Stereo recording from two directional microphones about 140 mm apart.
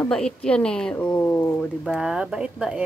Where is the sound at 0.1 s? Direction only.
5° left (ahead or behind).